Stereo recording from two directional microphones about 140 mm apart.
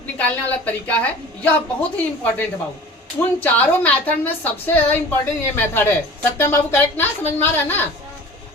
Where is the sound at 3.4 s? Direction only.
10° left (ahead or behind).